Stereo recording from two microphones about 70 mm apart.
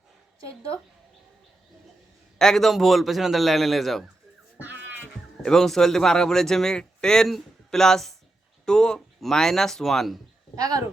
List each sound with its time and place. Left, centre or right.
2.4 s a man's voice: centre
5.4 s a man's voice: centre
10.5 s speech: right